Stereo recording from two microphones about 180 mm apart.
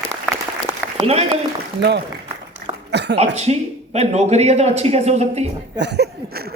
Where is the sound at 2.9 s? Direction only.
70° right (ahead or behind).